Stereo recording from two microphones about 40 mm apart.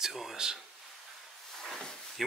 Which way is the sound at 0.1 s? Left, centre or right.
Centre.